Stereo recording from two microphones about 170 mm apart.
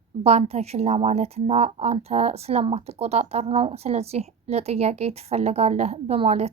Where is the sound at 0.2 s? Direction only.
40° right (ahead or behind).